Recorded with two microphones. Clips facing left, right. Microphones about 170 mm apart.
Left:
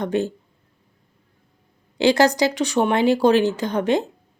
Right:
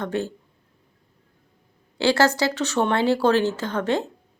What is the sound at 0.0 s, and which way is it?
Speech, 15° left (ahead or behind).